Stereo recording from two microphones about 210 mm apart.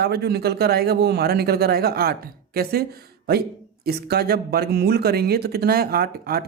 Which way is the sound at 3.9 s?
50° right (ahead or behind).